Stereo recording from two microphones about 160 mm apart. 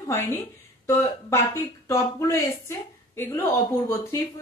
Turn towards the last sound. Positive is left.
turn(degrees=15)  # may be behind; listen again after turning